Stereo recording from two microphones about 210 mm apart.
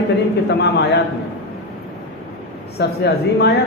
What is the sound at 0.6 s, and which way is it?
Speech, 50° left (ahead or behind).